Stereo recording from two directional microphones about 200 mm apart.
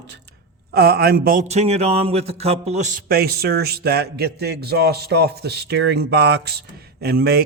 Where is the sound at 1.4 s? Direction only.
35° right (ahead or behind).